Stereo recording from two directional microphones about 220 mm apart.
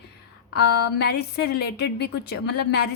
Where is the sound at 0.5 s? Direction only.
50° left (ahead or behind).